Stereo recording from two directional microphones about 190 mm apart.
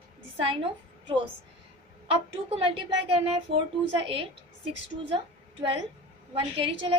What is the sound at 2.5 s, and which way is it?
A woman's voice, 30° right (ahead or behind).